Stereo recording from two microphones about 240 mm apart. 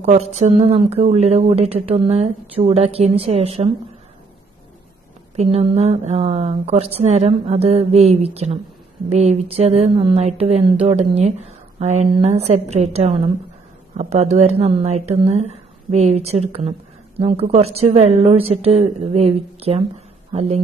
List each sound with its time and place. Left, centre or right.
0.0 s speech: right
5.3 s speech: right